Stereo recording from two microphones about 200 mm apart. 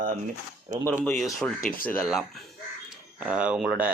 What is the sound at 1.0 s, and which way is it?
A man's voice, 10° left (ahead or behind).